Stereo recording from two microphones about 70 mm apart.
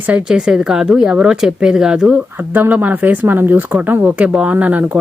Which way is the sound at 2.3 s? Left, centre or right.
Right.